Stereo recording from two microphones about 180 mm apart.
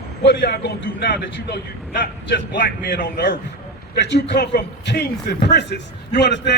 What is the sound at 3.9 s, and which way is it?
A man's voice, 75° left (ahead or behind).